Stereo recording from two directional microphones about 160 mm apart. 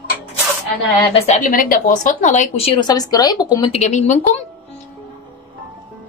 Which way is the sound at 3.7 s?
45° left (ahead or behind).